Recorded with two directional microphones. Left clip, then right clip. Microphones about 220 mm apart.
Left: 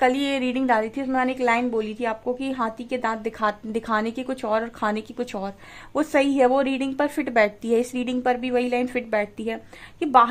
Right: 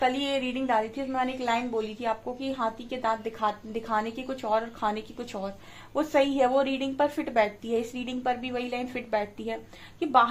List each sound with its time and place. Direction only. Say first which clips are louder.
0.0 s a woman's voice: left 5 dB; 45° left (ahead or behind)